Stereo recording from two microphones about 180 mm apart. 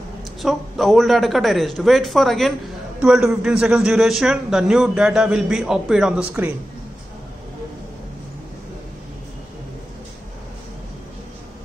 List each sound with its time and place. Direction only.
0.4 s a man's voice: centre (ahead or behind)